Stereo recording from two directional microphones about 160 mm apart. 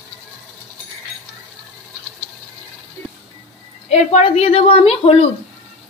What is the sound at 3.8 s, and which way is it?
A woman's voice, 40° left (ahead or behind).